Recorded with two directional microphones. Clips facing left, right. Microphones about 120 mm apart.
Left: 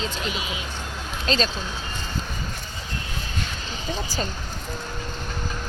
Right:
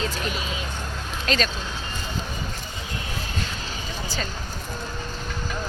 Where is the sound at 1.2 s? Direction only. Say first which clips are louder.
Left 1 dB; 30° left (ahead or behind).